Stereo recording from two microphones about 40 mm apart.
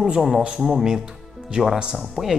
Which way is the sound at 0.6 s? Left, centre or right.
Centre.